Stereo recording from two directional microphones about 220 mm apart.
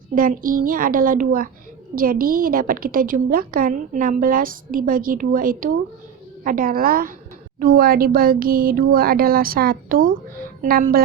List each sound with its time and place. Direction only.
0.1 s a woman's voice: 40° right (ahead or behind)